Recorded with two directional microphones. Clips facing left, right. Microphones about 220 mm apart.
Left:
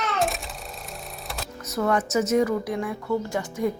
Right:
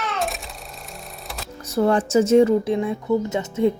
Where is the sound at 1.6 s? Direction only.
30° right (ahead or behind).